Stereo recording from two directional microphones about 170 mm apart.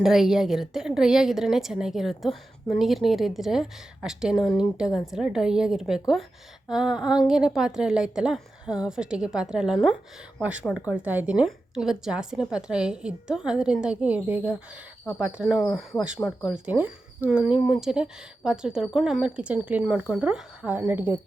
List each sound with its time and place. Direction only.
0.0 s a woman's voice: centre (ahead or behind)